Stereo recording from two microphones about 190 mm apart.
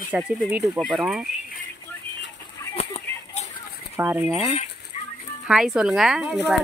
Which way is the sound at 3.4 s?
35° left (ahead or behind).